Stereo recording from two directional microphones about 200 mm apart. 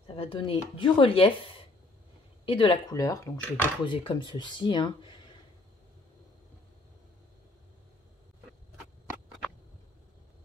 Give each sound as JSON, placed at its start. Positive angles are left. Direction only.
{"t": 0.0, "sound": "speech", "side_deg": 25}